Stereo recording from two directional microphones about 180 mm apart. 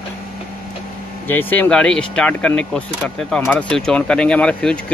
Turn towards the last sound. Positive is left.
turn(degrees=5)  # may be behind; listen again after turning